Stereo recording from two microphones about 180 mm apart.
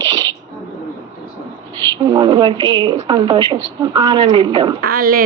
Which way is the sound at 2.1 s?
25° right (ahead or behind).